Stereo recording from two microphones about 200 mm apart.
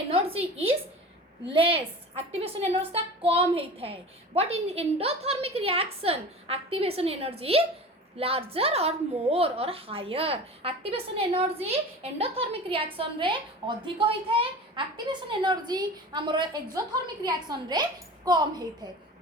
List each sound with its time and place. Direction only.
0.1 s a woman's voice: 30° right (ahead or behind)